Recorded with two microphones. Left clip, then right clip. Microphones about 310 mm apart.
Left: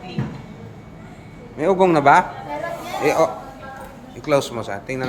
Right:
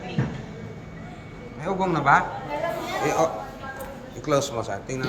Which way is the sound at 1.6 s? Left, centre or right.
Left.